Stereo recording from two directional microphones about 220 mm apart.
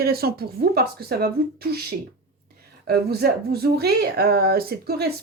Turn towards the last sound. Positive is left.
turn(degrees=-45)  # may be behind; listen again after turning